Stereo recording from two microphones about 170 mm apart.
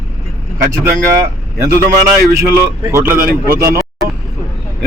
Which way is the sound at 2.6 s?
15° right (ahead or behind).